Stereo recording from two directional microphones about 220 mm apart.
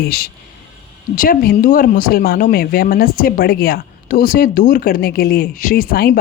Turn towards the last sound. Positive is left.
turn(degrees=40)  # may be behind; listen again after turning